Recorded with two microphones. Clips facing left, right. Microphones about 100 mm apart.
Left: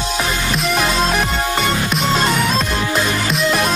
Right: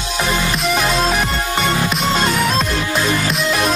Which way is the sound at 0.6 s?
Centre (ahead or behind).